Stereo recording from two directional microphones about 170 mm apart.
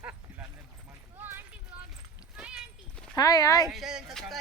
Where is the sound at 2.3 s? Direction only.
5° right (ahead or behind).